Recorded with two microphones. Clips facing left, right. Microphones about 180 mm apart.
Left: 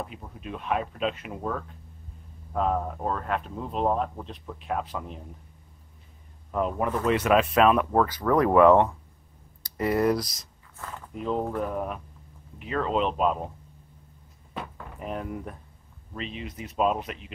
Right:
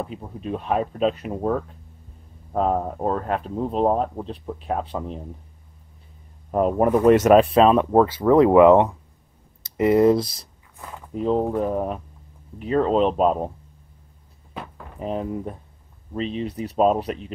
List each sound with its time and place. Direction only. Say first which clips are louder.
0.0 s speech: right 6 dB; 35° right (ahead or behind)
6.5 s speech: right 8 dB; 45° right (ahead or behind)
14.5 s door: right 1 dB; centre (ahead or behind)
15.0 s speech: right 6 dB; 30° right (ahead or behind)